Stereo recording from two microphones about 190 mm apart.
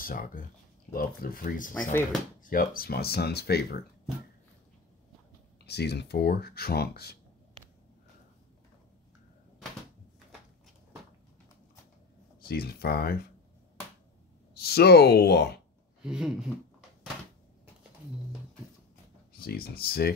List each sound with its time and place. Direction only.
0.0 s speech: 50° left (ahead or behind)
1.8 s speech: 10° left (ahead or behind)
2.4 s speech: 50° left (ahead or behind)
5.6 s speech: 60° left (ahead or behind)
12.4 s speech: 50° left (ahead or behind)
14.5 s speech: 55° left (ahead or behind)
16.0 s a sound: 5° right (ahead or behind)
19.3 s speech: 50° left (ahead or behind)